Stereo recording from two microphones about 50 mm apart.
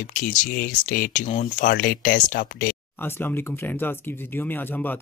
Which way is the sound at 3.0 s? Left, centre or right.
Left.